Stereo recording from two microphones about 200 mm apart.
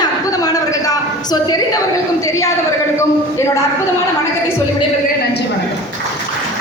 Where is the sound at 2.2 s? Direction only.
15° left (ahead or behind).